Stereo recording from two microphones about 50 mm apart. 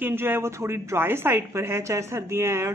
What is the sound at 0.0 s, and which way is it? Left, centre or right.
A woman's voice, right.